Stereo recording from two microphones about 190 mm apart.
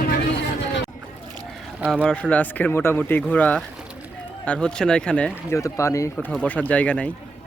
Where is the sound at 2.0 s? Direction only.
5° left (ahead or behind).